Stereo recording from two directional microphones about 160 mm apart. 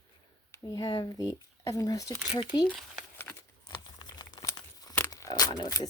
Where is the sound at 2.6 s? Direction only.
10° left (ahead or behind).